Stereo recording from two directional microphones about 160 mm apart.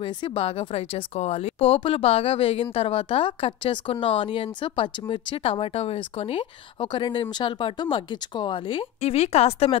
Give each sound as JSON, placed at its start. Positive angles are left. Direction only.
{"t": 0.0, "sound": "speech", "side_deg": 30}